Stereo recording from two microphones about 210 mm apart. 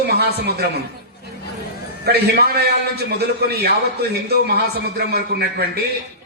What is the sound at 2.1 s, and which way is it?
Speech, 45° right (ahead or behind).